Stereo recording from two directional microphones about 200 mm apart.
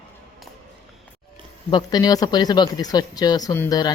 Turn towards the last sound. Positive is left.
turn(degrees=20)  # may be behind; listen again after turning